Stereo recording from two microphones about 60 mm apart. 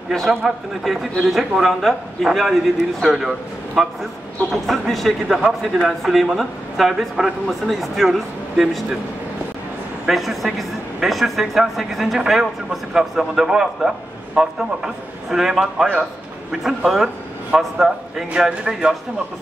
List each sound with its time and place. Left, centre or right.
0.1 s speech: centre
4.5 s speech: centre
10.0 s a man's voice: centre
18.3 s a man's voice: centre